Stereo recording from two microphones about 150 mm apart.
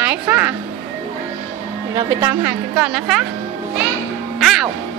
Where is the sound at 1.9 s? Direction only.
15° right (ahead or behind).